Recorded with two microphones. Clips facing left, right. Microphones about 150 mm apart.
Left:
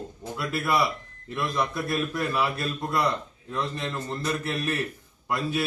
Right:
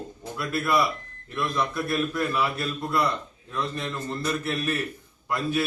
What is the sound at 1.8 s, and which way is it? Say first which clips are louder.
A man's voice: right 1 dB; 15° left (ahead or behind).